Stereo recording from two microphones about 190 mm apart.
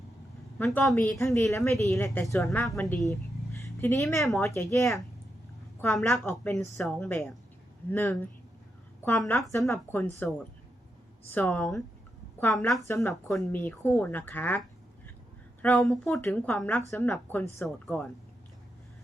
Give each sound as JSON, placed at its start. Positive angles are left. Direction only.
{"t": 0.6, "sound": "a woman's voice", "side_deg": 5}
{"t": 1.2, "sound": "speech", "side_deg": 15}
{"t": 2.0, "sound": "a woman's voice", "side_deg": 0}
{"t": 3.1, "sound": "a sound", "side_deg": 15}
{"t": 4.4, "sound": "a woman's voice", "side_deg": 15}
{"t": 6.5, "sound": "a woman's voice", "side_deg": 15}
{"t": 12.9, "sound": "speech", "side_deg": 15}
{"t": 15.6, "sound": "a woman's voice", "side_deg": 5}